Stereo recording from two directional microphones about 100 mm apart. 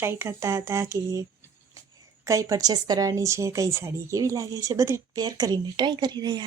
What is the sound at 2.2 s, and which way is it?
A woman's voice, 35° right (ahead or behind).